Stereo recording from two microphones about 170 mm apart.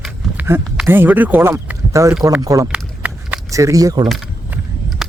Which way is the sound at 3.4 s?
20° right (ahead or behind).